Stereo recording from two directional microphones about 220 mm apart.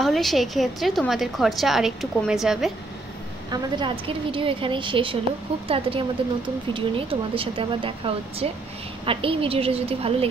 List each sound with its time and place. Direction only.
0.0 s a woman's voice: centre (ahead or behind)
3.4 s speech: 20° right (ahead or behind)